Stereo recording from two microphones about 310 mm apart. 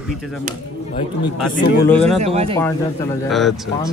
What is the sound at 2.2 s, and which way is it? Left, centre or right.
Speech, centre.